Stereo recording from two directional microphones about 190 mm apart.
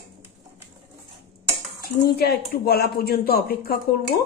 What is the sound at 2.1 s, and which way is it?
Speech, 55° left (ahead or behind).